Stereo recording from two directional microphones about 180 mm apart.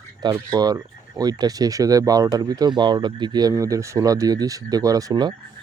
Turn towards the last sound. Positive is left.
turn(degrees=-20)  # may be behind; listen again after turning